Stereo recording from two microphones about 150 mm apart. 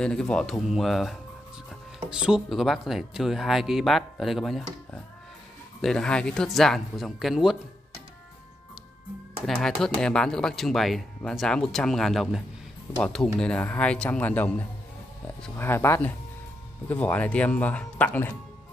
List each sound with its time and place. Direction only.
0.0 s speech: 5° left (ahead or behind)
9.5 s speech: 5° left (ahead or behind)
15.5 s speech: 15° left (ahead or behind)